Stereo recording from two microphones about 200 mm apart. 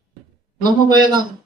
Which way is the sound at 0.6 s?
20° right (ahead or behind).